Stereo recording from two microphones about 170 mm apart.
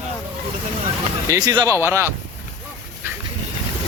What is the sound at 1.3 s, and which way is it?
Speech, 25° right (ahead or behind).